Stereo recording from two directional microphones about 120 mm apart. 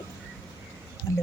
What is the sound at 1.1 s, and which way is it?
Speech, 30° left (ahead or behind).